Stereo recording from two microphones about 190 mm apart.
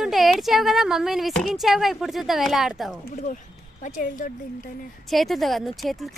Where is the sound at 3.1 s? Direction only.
40° left (ahead or behind).